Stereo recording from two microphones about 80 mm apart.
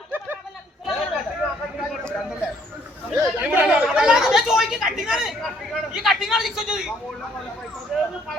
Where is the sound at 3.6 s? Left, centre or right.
Centre.